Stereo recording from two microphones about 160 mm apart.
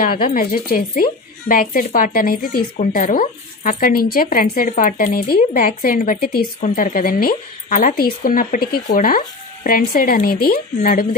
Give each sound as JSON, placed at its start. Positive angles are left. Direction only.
{"t": 0.2, "sound": "speech", "side_deg": 65}
{"t": 6.6, "sound": "speech", "side_deg": 55}